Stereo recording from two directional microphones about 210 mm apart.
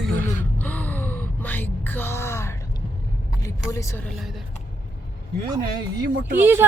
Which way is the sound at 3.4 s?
15° left (ahead or behind).